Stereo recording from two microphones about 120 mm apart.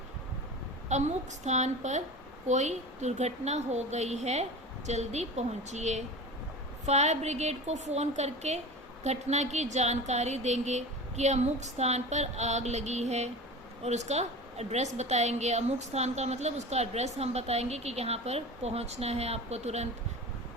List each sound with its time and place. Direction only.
0.9 s a woman's voice: 75° right (ahead or behind)